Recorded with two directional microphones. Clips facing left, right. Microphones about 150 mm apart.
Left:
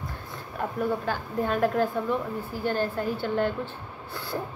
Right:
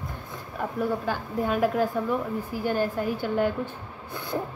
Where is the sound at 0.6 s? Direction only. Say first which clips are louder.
Even; 5° right (ahead or behind).